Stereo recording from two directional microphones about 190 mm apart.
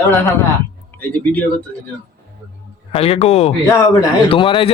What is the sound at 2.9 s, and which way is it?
Speech, 30° left (ahead or behind).